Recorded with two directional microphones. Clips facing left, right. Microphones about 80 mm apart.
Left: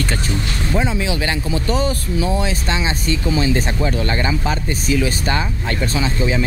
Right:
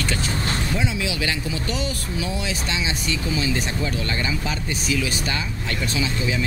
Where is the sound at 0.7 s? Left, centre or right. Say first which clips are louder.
Left 5 dB; left.